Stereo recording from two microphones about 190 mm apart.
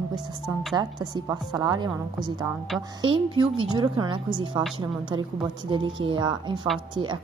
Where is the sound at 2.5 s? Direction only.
Centre (ahead or behind).